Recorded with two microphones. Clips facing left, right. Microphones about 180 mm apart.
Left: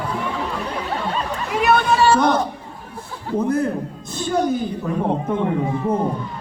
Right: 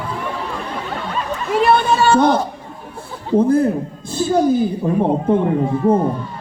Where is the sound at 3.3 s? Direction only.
25° right (ahead or behind).